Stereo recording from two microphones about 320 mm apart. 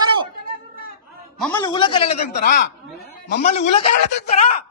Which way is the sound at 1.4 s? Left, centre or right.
Centre.